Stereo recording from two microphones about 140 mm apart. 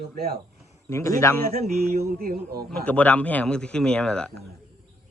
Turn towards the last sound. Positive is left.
turn(degrees=5)  # may be behind; listen again after turning